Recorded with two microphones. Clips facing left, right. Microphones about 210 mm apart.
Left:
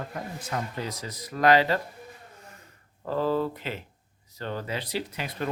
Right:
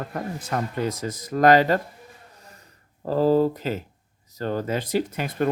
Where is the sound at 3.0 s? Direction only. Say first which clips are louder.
Right 7 dB; 40° right (ahead or behind).